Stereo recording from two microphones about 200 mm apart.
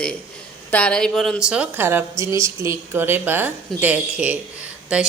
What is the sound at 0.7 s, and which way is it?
A woman's voice, 5° left (ahead or behind).